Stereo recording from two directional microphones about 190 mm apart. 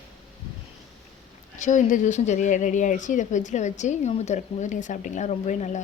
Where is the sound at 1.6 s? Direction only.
40° left (ahead or behind).